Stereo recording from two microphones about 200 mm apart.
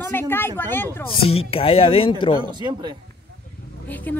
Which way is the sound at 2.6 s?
20° right (ahead or behind).